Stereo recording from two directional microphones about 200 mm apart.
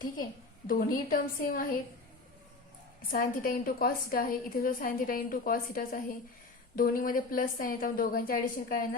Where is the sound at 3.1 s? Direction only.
45° left (ahead or behind).